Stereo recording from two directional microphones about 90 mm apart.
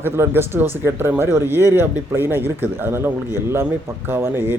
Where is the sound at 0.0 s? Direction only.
25° right (ahead or behind).